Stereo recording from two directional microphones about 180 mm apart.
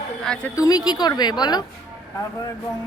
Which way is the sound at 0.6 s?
20° left (ahead or behind).